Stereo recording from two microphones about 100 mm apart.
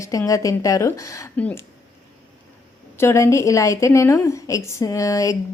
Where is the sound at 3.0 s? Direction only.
30° left (ahead or behind).